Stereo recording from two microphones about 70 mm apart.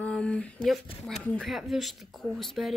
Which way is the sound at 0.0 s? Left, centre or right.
Centre.